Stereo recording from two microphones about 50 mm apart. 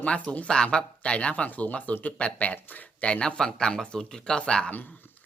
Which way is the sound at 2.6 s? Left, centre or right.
Left.